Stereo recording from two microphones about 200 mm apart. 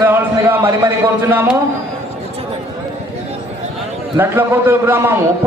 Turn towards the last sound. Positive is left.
turn(degrees=-10)  # may be behind; listen again after turning